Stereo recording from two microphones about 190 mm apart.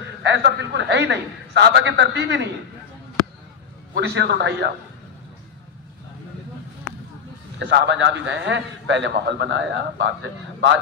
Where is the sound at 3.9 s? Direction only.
65° right (ahead or behind).